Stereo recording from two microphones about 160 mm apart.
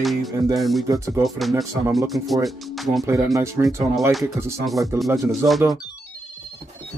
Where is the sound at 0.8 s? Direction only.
20° right (ahead or behind).